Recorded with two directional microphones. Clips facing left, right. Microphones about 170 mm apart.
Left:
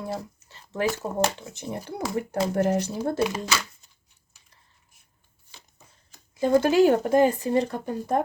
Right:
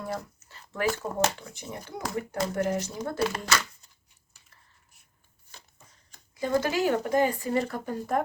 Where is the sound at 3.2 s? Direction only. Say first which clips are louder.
Left 2 dB; 5° left (ahead or behind).